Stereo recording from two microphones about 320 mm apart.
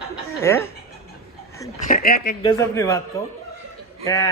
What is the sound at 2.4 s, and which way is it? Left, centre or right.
Speech, centre.